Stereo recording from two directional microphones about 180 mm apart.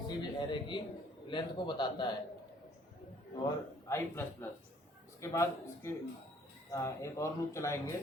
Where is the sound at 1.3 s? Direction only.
25° left (ahead or behind).